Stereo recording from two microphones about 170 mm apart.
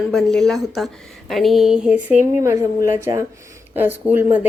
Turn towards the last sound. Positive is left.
turn(degrees=-10)  # may be behind; listen again after turning